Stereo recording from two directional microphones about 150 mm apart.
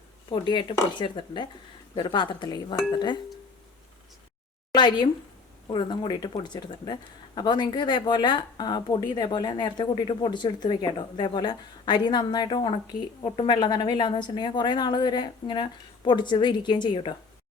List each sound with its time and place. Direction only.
0.3 s speech: 30° left (ahead or behind)
4.7 s speech: 30° left (ahead or behind)